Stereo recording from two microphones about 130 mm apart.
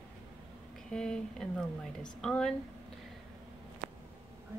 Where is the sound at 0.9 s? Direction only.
5° left (ahead or behind).